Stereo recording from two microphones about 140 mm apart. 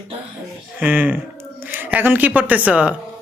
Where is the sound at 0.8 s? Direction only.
10° right (ahead or behind).